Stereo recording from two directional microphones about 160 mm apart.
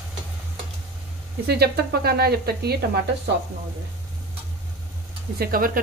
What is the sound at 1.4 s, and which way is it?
Speech, 85° right.